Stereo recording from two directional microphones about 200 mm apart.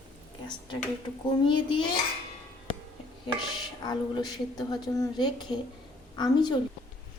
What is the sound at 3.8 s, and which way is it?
A woman's voice, 20° left (ahead or behind).